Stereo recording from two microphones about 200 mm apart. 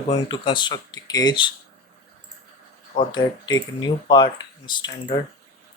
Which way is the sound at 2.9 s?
25° left (ahead or behind).